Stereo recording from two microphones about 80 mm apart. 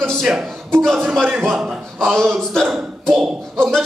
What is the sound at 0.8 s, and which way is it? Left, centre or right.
Speech, centre.